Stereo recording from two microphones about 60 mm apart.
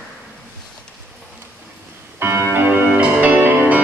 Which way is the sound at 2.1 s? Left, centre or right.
Right.